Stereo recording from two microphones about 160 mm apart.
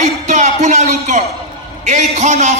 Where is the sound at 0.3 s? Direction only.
45° right (ahead or behind).